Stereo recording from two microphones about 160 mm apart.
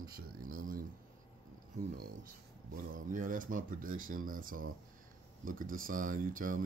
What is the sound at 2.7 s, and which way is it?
Speech, 55° right (ahead or behind).